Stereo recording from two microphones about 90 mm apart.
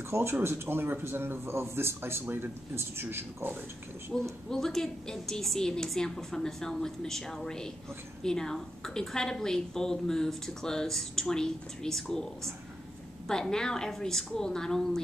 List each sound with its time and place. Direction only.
0.1 s a man's voice: 30° right (ahead or behind)
4.1 s a woman's voice: 5° left (ahead or behind)